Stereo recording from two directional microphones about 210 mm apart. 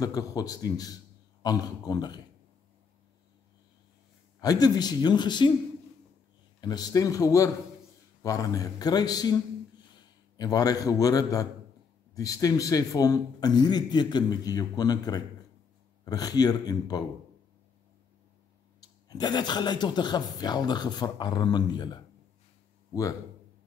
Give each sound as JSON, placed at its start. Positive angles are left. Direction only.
{"t": 0.0, "sound": "a man's voice", "side_deg": 15}
{"t": 4.4, "sound": "speech", "side_deg": 20}
{"t": 6.6, "sound": "a man's voice", "side_deg": 20}
{"t": 18.8, "sound": "speech", "side_deg": 20}